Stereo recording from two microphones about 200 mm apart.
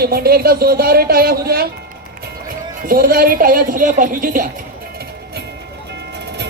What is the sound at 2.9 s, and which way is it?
Speech, 45° right (ahead or behind).